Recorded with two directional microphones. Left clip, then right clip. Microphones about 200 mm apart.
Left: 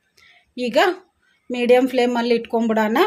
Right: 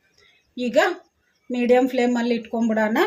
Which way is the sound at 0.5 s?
45° left (ahead or behind).